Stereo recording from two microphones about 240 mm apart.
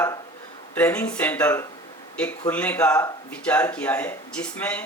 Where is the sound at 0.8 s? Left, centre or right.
Centre.